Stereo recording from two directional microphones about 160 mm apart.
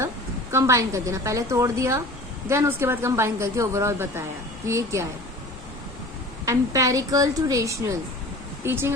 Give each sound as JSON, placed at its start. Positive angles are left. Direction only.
{"t": 0.5, "sound": "a woman's voice", "side_deg": -20}
{"t": 6.4, "sound": "a woman's voice", "side_deg": -20}